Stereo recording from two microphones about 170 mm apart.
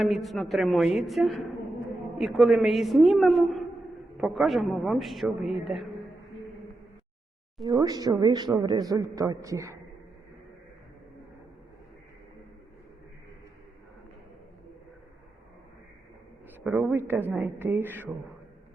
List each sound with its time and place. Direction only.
0.0 s a woman's voice: centre (ahead or behind)
7.7 s a man's voice: 20° right (ahead or behind)
16.6 s a woman's voice: 10° right (ahead or behind)